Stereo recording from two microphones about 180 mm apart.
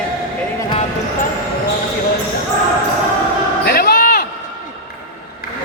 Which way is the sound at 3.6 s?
55° left (ahead or behind).